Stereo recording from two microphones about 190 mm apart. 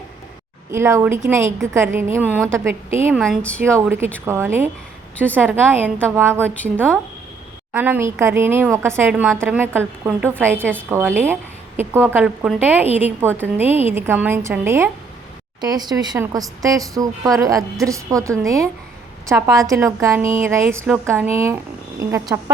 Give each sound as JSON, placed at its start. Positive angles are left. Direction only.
{"t": 0.7, "sound": "a woman's voice", "side_deg": -15}
{"t": 3.2, "sound": "speech", "side_deg": 5}
{"t": 3.6, "sound": "a woman's voice", "side_deg": -15}
{"t": 5.1, "sound": "a woman's voice", "side_deg": 10}
{"t": 5.5, "sound": "a woman's voice", "side_deg": -10}